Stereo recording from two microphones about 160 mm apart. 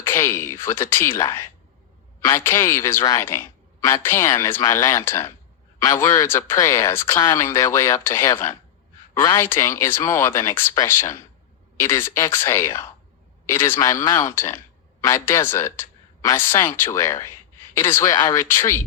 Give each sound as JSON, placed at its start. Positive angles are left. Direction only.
{"t": 0.0, "sound": "speech", "side_deg": 15}
{"t": 2.2, "sound": "a woman's voice", "side_deg": 15}